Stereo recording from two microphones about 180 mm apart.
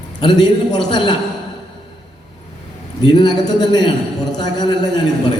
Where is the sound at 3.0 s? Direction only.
25° left (ahead or behind).